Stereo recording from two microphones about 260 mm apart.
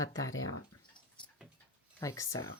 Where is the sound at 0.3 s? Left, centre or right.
Left.